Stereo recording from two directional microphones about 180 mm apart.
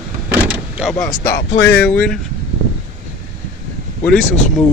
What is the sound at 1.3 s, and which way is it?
Speech, 60° left (ahead or behind).